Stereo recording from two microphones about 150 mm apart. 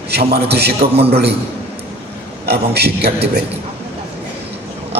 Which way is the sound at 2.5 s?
90° right.